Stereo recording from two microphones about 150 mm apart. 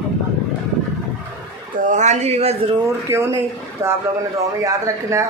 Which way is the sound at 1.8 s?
50° right (ahead or behind).